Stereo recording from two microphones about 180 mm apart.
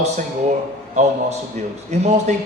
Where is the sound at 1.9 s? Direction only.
40° right (ahead or behind).